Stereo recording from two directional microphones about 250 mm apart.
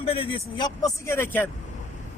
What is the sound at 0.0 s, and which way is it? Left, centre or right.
A man's voice, left.